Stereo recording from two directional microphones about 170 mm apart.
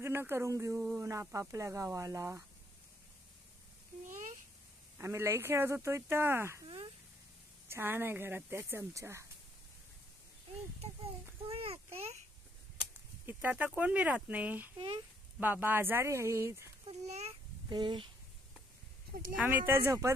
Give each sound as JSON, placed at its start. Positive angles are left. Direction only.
{"t": 0.0, "sound": "speech", "side_deg": -15}
{"t": 4.9, "sound": "speech", "side_deg": -15}
{"t": 7.6, "sound": "speech", "side_deg": -15}
{"t": 11.5, "sound": "a sound", "side_deg": -35}
{"t": 13.3, "sound": "speech", "side_deg": -10}
{"t": 16.8, "sound": "a sound", "side_deg": -40}
{"t": 17.6, "sound": "speech", "side_deg": -25}
{"t": 19.3, "sound": "speech", "side_deg": -10}